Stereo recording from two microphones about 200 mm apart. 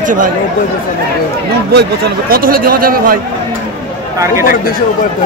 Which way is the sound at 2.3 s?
45° right (ahead or behind).